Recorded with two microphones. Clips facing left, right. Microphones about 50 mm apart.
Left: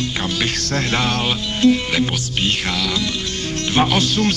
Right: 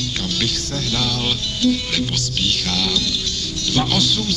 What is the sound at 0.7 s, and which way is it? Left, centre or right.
Speech, left.